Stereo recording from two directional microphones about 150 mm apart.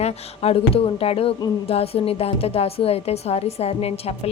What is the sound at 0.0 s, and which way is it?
A woman's voice, 40° left (ahead or behind).